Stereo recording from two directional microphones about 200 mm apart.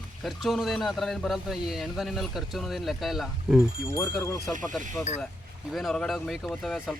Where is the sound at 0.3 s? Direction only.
Centre (ahead or behind).